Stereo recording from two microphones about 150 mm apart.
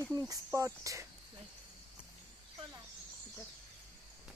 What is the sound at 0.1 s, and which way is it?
Speech, 20° right (ahead or behind).